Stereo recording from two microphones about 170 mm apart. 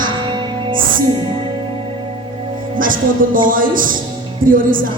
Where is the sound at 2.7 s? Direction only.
55° right (ahead or behind).